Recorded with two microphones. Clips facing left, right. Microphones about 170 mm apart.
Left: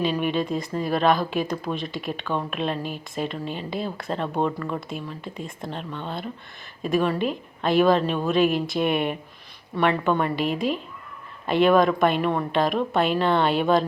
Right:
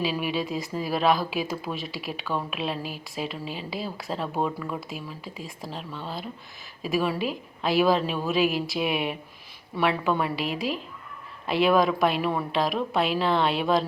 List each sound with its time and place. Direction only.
0.0 s speech: 5° right (ahead or behind)